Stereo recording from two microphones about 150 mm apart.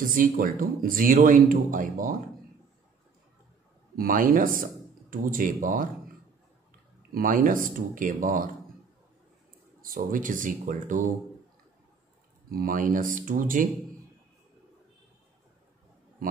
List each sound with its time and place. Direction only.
0.0 s speech: 65° right (ahead or behind)
3.9 s speech: 70° right (ahead or behind)
7.2 s speech: 65° right (ahead or behind)
9.8 s speech: 65° right (ahead or behind)
12.4 s speech: 70° right (ahead or behind)